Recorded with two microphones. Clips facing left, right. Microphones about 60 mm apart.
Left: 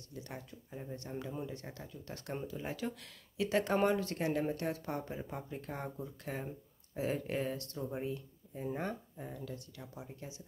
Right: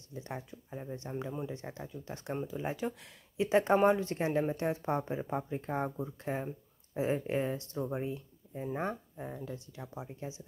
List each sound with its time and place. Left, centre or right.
0.1 s speech: right